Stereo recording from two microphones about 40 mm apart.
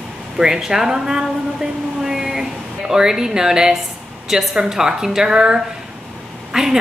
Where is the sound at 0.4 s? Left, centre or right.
Centre.